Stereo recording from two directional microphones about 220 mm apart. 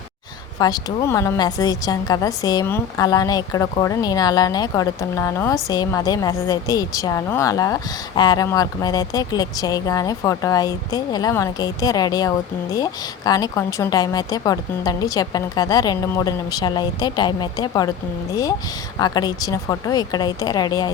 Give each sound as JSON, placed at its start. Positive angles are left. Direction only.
{"t": 0.6, "sound": "a woman's voice", "side_deg": 15}